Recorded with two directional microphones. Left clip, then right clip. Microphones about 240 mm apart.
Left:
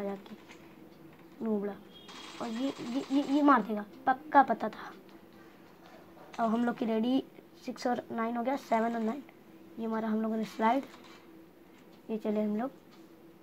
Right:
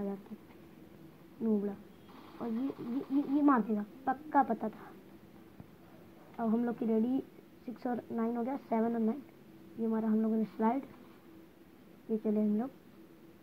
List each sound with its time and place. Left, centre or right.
1.4 s speech: left
2.5 s speech: centre
3.0 s speech: centre
6.3 s a woman's voice: left
12.2 s speech: left